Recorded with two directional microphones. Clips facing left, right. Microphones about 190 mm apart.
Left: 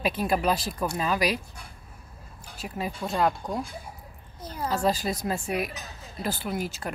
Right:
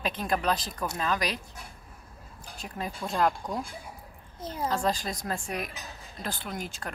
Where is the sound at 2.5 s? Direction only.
5° left (ahead or behind).